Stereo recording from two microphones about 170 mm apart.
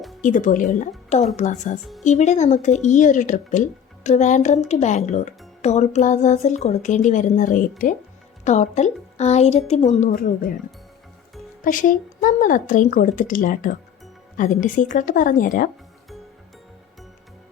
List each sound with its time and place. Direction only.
0.2 s a woman's voice: 50° left (ahead or behind)
10.1 s speech: 60° left (ahead or behind)
11.6 s speech: 50° left (ahead or behind)